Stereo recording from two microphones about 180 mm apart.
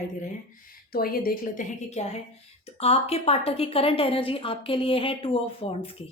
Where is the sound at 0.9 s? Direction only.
55° left (ahead or behind).